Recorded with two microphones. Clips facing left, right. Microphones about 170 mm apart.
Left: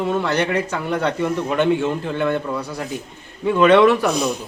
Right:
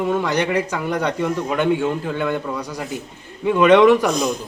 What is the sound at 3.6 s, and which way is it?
Speech, 15° right (ahead or behind).